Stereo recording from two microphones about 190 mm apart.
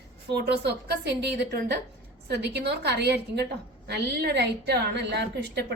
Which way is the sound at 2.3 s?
60° right (ahead or behind).